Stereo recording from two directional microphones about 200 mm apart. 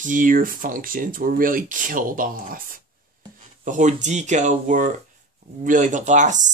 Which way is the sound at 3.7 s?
40° right (ahead or behind).